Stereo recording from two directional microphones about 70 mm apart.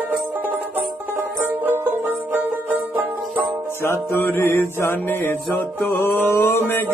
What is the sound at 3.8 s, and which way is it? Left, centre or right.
Music, left.